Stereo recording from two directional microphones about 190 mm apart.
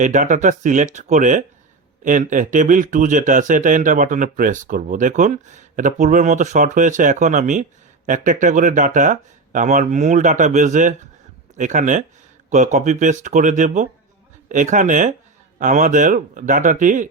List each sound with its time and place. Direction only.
0.0 s speech: 40° right (ahead or behind)